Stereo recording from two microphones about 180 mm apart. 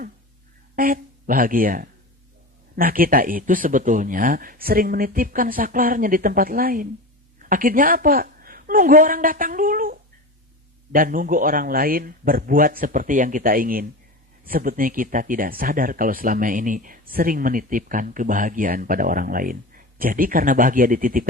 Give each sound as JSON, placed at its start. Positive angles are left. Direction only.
{"t": 0.8, "sound": "a woman's voice", "side_deg": -50}